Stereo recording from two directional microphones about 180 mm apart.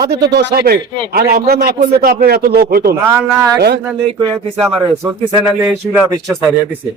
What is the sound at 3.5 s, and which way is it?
Speech, 65° right (ahead or behind).